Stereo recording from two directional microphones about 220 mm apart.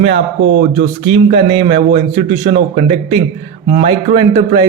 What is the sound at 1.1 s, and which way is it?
A man's voice, 25° right (ahead or behind).